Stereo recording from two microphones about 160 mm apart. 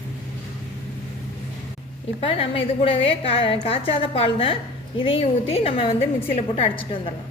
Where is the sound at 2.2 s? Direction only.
35° left (ahead or behind).